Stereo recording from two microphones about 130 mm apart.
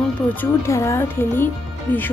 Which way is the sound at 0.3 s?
20° left (ahead or behind).